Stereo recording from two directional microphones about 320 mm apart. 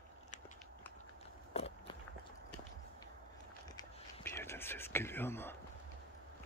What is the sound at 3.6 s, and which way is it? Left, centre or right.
Whispering, centre.